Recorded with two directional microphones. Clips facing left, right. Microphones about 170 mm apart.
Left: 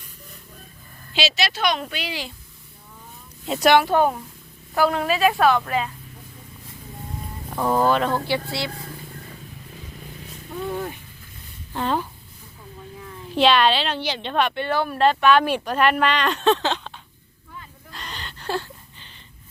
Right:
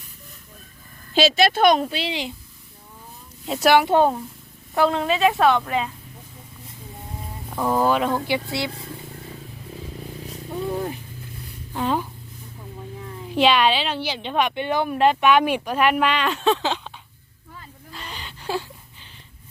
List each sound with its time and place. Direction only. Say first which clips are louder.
1.1 s a woman's voice: right 7 dB; 50° right (ahead or behind)
1.8 s a woman's voice: right 4 dB; 30° right (ahead or behind)
3.4 s speech: even; centre (ahead or behind)
3.8 s a woman's voice: right 2 dB; 25° right (ahead or behind)
7.5 s speech: even; 5° right (ahead or behind)
8.4 s a woman's voice: right 1 dB; 20° right (ahead or behind)
10.2 s wild animals: right 2 dB; 30° right (ahead or behind)
11.7 s speech: right 1 dB; 10° right (ahead or behind)
13.3 s speech: even; 10° right (ahead or behind)
17.9 s gasp: even; 10° right (ahead or behind)